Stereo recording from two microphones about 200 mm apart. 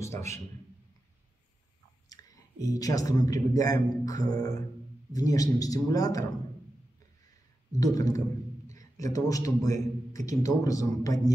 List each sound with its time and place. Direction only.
0.0 s a man's voice: 15° left (ahead or behind)
2.0 s a man's voice: 15° left (ahead or behind)
7.8 s a man's voice: 15° left (ahead or behind)